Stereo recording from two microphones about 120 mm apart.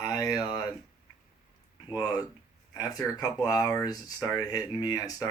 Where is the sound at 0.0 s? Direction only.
30° left (ahead or behind).